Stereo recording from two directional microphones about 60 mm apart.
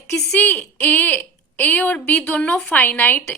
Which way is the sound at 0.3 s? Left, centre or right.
Left.